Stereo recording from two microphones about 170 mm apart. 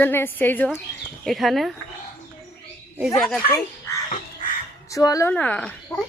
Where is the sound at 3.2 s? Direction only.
5° left (ahead or behind).